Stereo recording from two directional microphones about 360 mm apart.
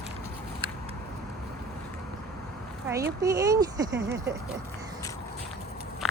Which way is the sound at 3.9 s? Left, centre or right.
Right.